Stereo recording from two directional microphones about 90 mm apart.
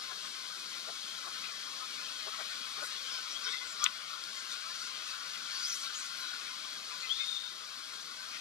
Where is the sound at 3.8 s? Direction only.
10° right (ahead or behind).